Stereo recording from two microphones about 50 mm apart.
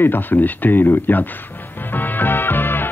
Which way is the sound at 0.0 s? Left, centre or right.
Left.